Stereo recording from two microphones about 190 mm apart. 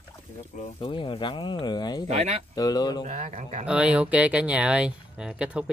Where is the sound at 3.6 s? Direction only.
5° right (ahead or behind).